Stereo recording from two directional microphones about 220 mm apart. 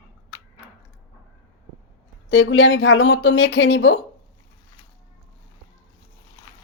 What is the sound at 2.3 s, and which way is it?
Speech, 60° left (ahead or behind).